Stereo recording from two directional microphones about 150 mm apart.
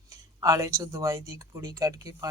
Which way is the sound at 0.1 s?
25° right (ahead or behind).